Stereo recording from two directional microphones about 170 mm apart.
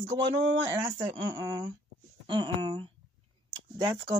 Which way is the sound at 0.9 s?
20° right (ahead or behind).